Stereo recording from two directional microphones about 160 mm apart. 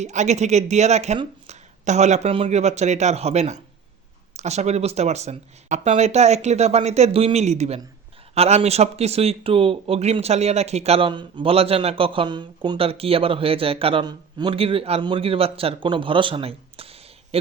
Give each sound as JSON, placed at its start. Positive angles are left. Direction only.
{"t": 0.0, "sound": "a man's voice", "side_deg": -45}